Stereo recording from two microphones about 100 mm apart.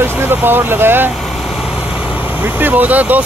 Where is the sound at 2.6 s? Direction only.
15° right (ahead or behind).